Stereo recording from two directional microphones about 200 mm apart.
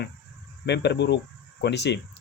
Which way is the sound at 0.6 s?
60° left (ahead or behind).